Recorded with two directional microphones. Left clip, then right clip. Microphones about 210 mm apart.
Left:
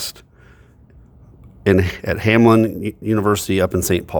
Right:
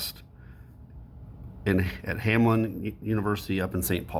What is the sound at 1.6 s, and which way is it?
Speech, 50° left (ahead or behind).